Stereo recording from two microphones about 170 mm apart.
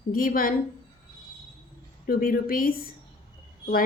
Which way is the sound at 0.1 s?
55° left (ahead or behind).